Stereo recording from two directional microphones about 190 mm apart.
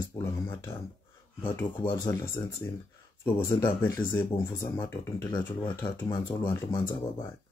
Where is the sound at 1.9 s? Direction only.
20° left (ahead or behind).